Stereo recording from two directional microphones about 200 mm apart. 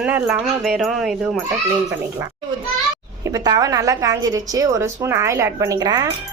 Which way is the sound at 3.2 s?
20° right (ahead or behind).